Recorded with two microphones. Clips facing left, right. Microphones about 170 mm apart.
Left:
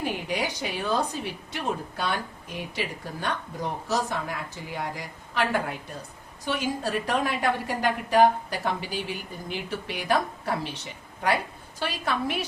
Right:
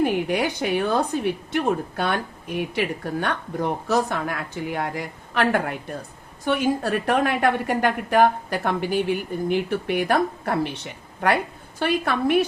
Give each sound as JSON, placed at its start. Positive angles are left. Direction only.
{"t": 0.0, "sound": "a woman's voice", "side_deg": -55}
{"t": 11.8, "sound": "a woman's voice", "side_deg": -55}